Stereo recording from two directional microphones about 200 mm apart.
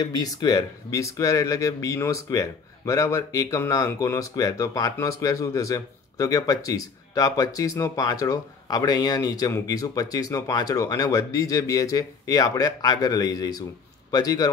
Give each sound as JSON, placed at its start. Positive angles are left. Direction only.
{"t": 0.0, "sound": "a man's voice", "side_deg": 20}